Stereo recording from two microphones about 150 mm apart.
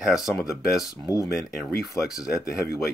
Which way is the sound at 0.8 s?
25° left (ahead or behind).